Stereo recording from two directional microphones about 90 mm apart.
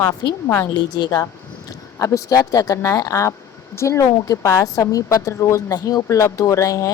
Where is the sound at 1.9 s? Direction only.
35° left (ahead or behind).